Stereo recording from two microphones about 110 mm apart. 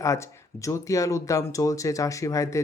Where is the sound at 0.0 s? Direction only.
30° left (ahead or behind).